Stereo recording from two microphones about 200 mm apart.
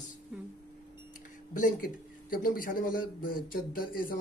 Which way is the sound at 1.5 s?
40° left (ahead or behind).